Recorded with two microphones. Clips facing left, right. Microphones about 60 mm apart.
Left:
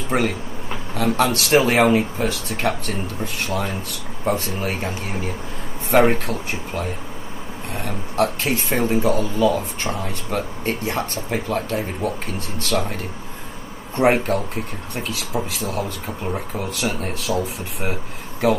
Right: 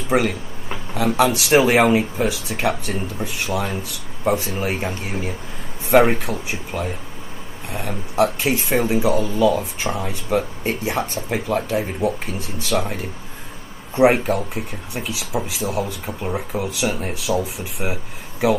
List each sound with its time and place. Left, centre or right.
0.1 s speech: centre